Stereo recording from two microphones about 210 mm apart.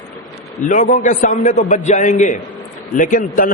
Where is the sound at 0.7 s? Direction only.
35° left (ahead or behind).